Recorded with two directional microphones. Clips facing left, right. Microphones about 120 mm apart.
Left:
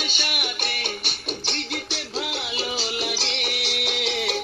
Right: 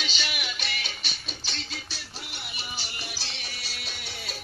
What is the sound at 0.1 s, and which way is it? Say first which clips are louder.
Music: left 4 dB; 55° left (ahead or behind).